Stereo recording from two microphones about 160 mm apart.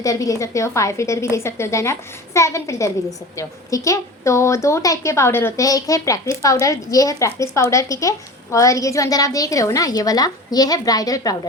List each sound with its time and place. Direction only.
0.0 s a woman's voice: 20° left (ahead or behind)